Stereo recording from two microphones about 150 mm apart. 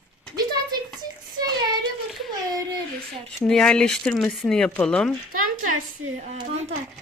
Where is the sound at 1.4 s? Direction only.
25° right (ahead or behind).